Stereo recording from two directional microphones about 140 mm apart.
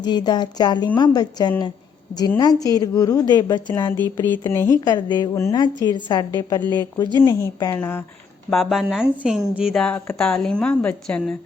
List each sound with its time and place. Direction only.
0.0 s a woman's voice: 30° left (ahead or behind)
3.9 s a woman's voice: 15° left (ahead or behind)
4.9 s a woman's voice: 30° left (ahead or behind); by 8.0 s 15° left (ahead or behind)
8.4 s a woman's voice: centre (ahead or behind)